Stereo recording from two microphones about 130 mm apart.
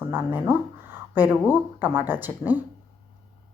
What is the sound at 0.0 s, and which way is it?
A woman's voice, 15° right (ahead or behind).